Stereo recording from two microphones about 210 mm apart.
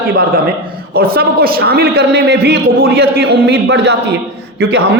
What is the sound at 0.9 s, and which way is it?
A woman's voice, 45° right (ahead or behind).